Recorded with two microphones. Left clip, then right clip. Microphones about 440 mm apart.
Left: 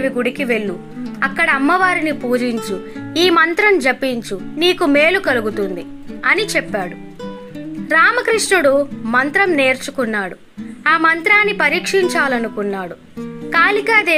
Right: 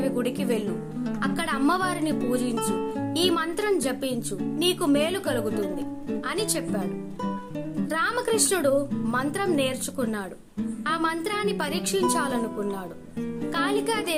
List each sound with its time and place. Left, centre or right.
0.2 s speech: right
7.9 s speech: right